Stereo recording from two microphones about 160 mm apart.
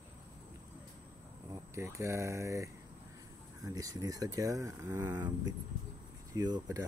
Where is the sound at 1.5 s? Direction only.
20° right (ahead or behind).